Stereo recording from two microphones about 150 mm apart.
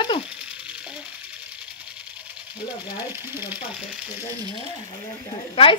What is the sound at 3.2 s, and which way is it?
Speech, 15° right (ahead or behind).